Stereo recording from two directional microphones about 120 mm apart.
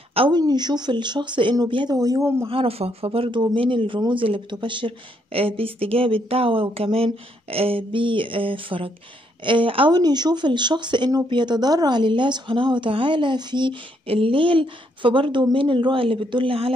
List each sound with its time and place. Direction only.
0.1 s speech: 50° right (ahead or behind)
0.4 s speech: 35° right (ahead or behind)
2.4 s speech: 50° right (ahead or behind)
9.9 s speech: 35° right (ahead or behind)